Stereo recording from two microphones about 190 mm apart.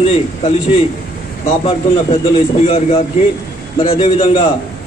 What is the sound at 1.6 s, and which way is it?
A man's voice, 30° left (ahead or behind).